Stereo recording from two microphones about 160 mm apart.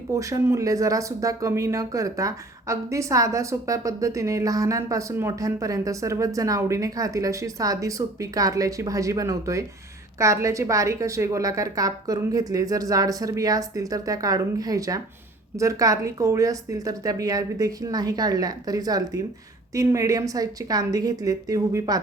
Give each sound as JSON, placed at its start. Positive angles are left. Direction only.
{"t": 0.1, "sound": "speech", "side_deg": -20}